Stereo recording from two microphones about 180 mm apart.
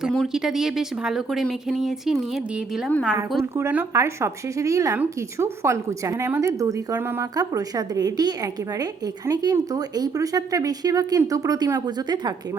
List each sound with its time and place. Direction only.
0.0 s speech: centre (ahead or behind)
3.6 s speech: 10° right (ahead or behind)